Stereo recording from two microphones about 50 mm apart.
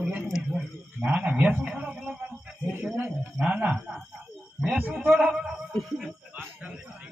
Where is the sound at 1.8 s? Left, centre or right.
Right.